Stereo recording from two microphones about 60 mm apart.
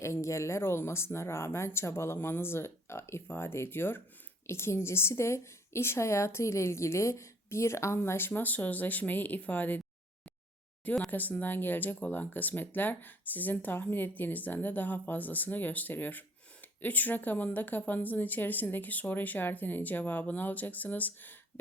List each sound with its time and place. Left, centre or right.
0.0 s speech: left
8.3 s speech: left
11.1 s speech: left